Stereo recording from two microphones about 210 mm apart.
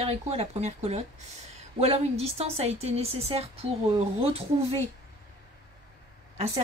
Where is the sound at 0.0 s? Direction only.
30° right (ahead or behind).